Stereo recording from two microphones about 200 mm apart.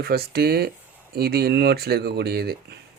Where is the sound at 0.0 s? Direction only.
50° right (ahead or behind).